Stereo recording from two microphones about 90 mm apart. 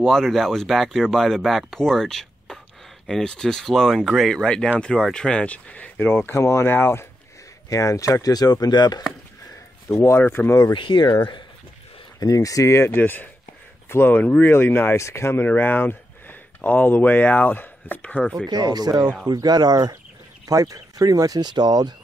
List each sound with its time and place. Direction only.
0.0 s speech: centre (ahead or behind); by 7.1 s 25° left (ahead or behind)
7.7 s speech: 35° left (ahead or behind)
9.8 s speech: 35° left (ahead or behind)
10.7 s speech: 65° left (ahead or behind)
12.2 s speech: 40° left (ahead or behind); by 18.3 s 15° left (ahead or behind)
18.5 s speech: 50° right (ahead or behind)